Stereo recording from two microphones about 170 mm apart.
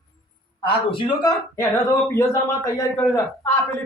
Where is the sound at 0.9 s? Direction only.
30° left (ahead or behind).